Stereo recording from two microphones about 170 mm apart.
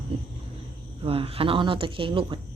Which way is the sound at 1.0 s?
35° right (ahead or behind).